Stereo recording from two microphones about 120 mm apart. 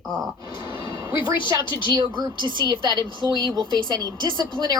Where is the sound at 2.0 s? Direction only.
35° right (ahead or behind).